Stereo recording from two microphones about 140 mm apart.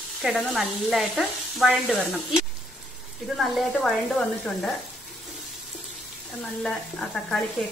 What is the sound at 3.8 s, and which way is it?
Speech, 5° left (ahead or behind).